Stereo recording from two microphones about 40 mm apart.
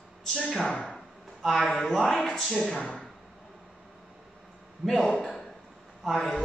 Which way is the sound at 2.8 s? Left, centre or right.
Centre.